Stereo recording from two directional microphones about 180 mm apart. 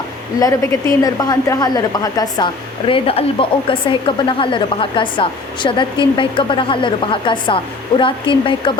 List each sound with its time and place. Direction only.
0.3 s a woman's voice: 20° left (ahead or behind)